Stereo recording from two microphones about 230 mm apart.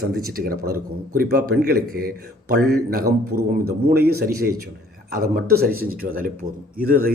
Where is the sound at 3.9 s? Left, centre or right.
Right.